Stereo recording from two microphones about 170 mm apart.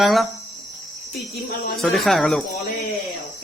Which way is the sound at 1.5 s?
65° left (ahead or behind).